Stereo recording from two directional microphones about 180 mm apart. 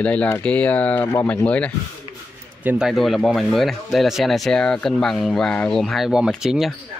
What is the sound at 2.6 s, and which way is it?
Speech, 5° right (ahead or behind).